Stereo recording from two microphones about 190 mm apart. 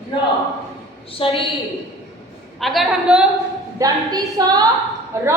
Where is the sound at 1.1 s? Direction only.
25° left (ahead or behind).